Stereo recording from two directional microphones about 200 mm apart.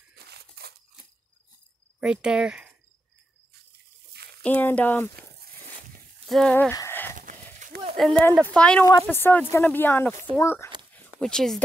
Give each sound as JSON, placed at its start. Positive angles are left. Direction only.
{"t": 0.1, "sound": "scissors", "side_deg": -55}
{"t": 2.0, "sound": "speech", "side_deg": -5}
{"t": 3.7, "sound": "water", "side_deg": -55}
{"t": 4.4, "sound": "speech", "side_deg": 10}
{"t": 6.2, "sound": "speech", "side_deg": 5}
{"t": 6.7, "sound": "a sound", "side_deg": 15}
{"t": 7.9, "sound": "speech", "side_deg": 0}